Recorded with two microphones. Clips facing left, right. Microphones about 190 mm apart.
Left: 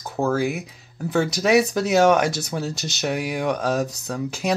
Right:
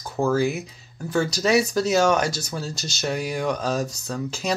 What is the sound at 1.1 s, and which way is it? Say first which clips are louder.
Speech: left 2 dB; 15° left (ahead or behind).